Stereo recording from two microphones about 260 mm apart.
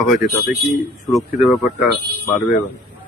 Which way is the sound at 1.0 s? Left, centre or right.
Centre.